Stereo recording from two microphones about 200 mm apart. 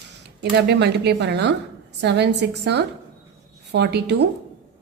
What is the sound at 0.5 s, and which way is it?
A woman's voice, 55° right (ahead or behind).